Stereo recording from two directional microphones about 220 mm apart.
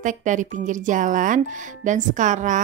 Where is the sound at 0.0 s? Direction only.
35° right (ahead or behind).